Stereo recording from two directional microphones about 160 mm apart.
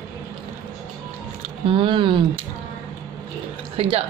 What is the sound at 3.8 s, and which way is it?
Speech, 40° right (ahead or behind).